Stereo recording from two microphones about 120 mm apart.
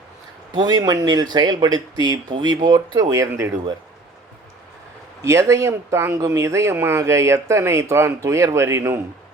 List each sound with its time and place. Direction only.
0.5 s speech: 35° right (ahead or behind)
5.2 s speech: 25° right (ahead or behind)